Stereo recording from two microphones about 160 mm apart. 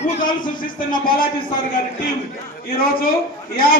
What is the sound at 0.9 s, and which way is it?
Speech, 60° left (ahead or behind).